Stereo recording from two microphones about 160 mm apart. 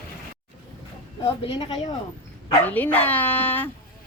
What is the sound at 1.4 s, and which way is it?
Speech, 30° left (ahead or behind).